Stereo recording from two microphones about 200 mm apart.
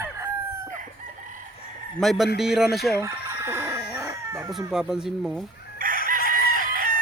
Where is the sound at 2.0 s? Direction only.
Centre (ahead or behind).